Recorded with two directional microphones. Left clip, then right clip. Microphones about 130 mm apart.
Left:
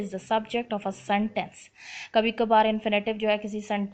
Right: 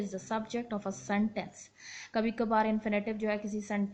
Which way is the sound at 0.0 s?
35° left (ahead or behind).